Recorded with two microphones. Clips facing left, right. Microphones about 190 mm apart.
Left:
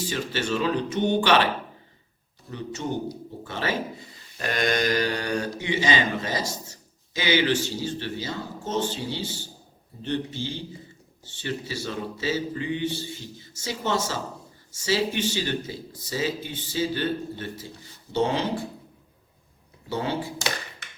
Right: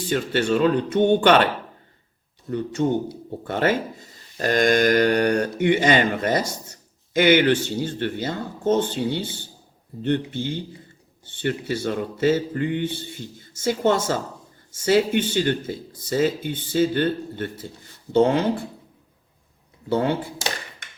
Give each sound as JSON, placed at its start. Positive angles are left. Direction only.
{"t": 0.1, "sound": "speech", "side_deg": -55}
{"t": 3.4, "sound": "speech", "side_deg": -55}
{"t": 19.9, "sound": "speech", "side_deg": -55}